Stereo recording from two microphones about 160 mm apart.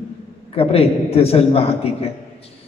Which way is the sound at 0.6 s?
40° left (ahead or behind).